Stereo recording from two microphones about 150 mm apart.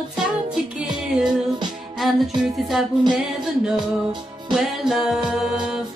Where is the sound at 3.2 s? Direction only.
Centre (ahead or behind).